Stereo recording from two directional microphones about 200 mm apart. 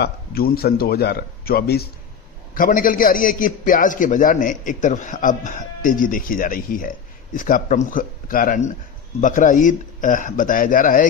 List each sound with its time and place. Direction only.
0.0 s a man's voice: 50° left (ahead or behind)